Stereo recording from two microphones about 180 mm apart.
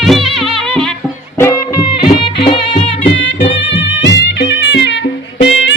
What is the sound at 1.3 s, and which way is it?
Music, 15° left (ahead or behind).